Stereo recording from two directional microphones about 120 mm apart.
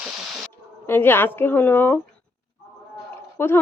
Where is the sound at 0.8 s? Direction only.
20° left (ahead or behind).